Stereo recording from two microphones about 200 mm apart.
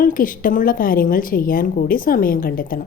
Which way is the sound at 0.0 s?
45° left (ahead or behind).